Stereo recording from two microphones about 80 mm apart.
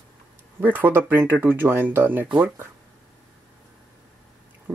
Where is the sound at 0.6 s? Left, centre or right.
Right.